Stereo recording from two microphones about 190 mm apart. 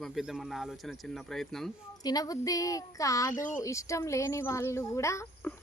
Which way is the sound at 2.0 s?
20° left (ahead or behind).